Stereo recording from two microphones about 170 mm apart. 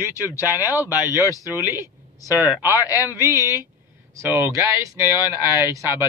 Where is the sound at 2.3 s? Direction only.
10° right (ahead or behind).